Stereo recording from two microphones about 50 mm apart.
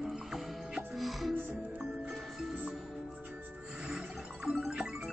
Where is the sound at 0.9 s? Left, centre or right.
Centre.